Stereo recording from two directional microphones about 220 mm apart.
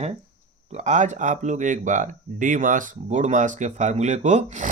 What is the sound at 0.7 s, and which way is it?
Speech, 30° right (ahead or behind).